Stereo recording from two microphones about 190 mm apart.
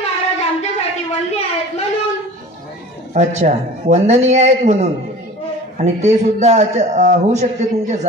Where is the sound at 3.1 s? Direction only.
40° right (ahead or behind).